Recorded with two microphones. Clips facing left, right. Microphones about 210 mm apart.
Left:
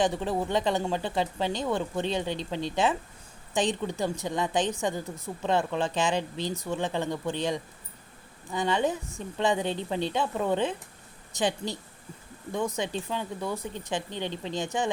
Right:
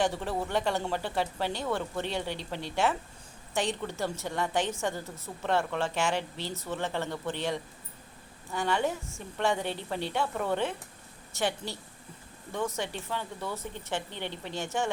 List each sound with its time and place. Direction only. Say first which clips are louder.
0.0 s a woman's voice: left 3 dB; 20° left (ahead or behind)